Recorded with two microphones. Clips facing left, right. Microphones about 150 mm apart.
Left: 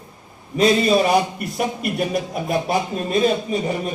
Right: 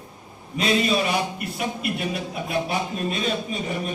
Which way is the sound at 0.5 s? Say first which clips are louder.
Left 6 dB; 35° left (ahead or behind).